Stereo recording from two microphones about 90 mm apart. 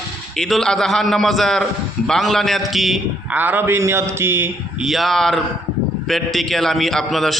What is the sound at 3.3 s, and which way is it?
A man's voice, 20° right (ahead or behind).